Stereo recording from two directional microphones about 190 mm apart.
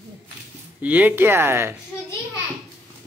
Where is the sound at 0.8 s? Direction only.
10° right (ahead or behind).